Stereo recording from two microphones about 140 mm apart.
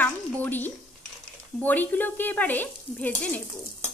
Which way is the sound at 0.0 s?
15° left (ahead or behind).